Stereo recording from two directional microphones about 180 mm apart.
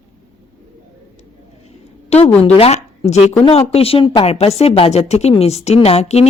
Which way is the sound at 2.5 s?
35° left (ahead or behind).